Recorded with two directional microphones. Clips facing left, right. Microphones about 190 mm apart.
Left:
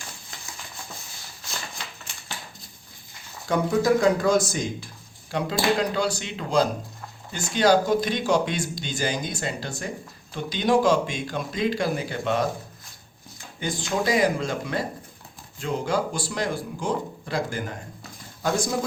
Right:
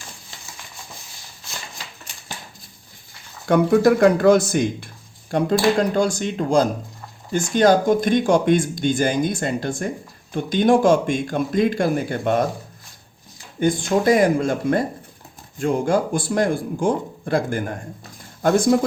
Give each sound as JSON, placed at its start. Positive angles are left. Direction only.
{"t": 3.4, "sound": "speech", "side_deg": -60}
{"t": 13.6, "sound": "speech", "side_deg": -50}